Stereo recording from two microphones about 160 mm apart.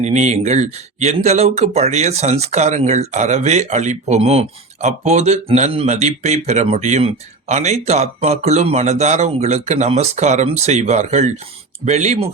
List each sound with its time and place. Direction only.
0.0 s speech: 45° right (ahead or behind)